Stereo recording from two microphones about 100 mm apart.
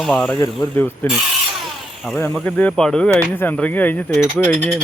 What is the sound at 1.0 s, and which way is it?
Speech, 20° left (ahead or behind).